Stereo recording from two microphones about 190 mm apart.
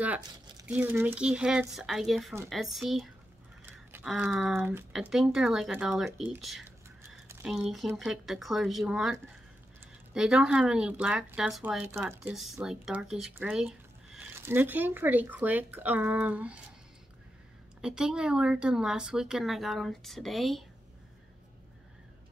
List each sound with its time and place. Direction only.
0.7 s speech: 10° right (ahead or behind)
3.6 s a sound: 5° right (ahead or behind)
4.6 s speech: 10° right (ahead or behind)
5.1 s speech: centre (ahead or behind)
7.0 s a sound: 15° right (ahead or behind)
7.5 s speech: centre (ahead or behind)
12.2 s speech: centre (ahead or behind)
17.8 s speech: 5° right (ahead or behind)